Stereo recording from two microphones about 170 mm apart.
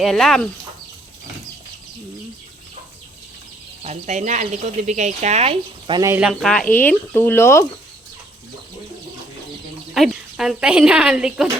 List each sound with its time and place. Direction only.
0.0 s speech: centre (ahead or behind)
3.8 s speech: 45° right (ahead or behind)
6.0 s speech: 15° right (ahead or behind)
6.2 s speech: centre (ahead or behind)
9.9 s speech: centre (ahead or behind)